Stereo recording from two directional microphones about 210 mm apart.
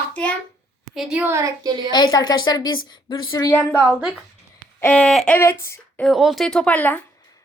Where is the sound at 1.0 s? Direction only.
5° right (ahead or behind).